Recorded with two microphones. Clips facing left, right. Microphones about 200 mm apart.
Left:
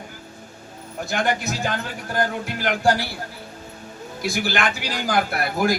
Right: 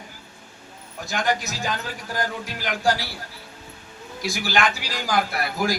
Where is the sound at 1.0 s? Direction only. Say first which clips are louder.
Left 2 dB; 55° left (ahead or behind).